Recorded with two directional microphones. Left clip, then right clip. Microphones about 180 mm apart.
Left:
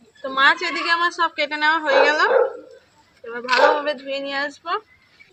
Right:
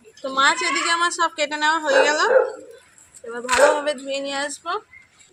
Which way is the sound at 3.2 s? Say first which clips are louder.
Left 1 dB; 5° right (ahead or behind).